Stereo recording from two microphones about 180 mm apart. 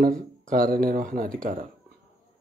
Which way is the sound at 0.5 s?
50° right (ahead or behind).